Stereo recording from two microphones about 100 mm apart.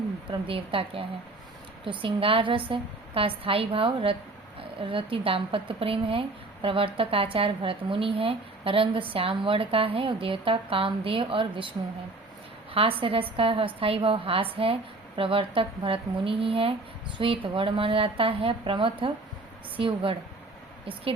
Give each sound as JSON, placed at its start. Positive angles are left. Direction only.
{"t": 0.3, "sound": "a woman's voice", "side_deg": -65}
{"t": 13.0, "sound": "a woman's voice", "side_deg": -65}